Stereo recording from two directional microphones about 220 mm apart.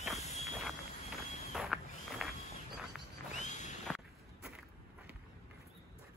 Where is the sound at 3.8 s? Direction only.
Centre (ahead or behind).